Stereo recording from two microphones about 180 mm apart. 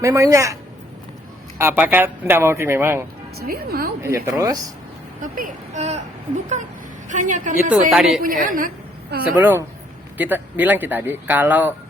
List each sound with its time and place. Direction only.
0.0 s speech: 20° right (ahead or behind)
3.3 s a woman's voice: 60° right (ahead or behind)
4.0 s speech: 15° right (ahead or behind)
5.2 s speech: 50° right (ahead or behind)
7.1 s a woman's voice: 45° right (ahead or behind)
7.7 s a woman's voice: 5° right (ahead or behind)
8.2 s a woman's voice: 50° right (ahead or behind)
9.4 s speech: 10° right (ahead or behind)